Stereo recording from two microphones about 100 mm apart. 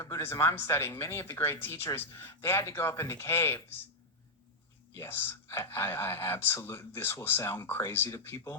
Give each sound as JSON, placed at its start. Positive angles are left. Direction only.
{"t": 0.0, "sound": "speech", "side_deg": 25}
{"t": 4.9, "sound": "speech", "side_deg": 20}